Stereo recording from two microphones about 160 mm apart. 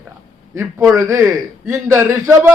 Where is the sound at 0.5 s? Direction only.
15° right (ahead or behind).